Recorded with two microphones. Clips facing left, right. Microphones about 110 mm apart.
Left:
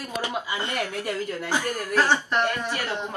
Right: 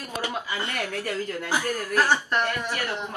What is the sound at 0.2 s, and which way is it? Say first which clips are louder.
Speech: even; 20° left (ahead or behind).